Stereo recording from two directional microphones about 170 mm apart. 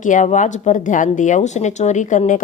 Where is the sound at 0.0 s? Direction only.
45° left (ahead or behind).